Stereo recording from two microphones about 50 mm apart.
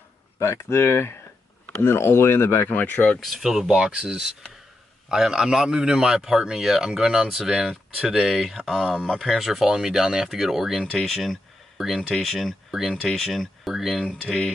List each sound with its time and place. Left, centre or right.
0.4 s speech: left
2.7 s speech: left
3.2 s speech: centre
10.9 s speech: centre
13.0 s speech: centre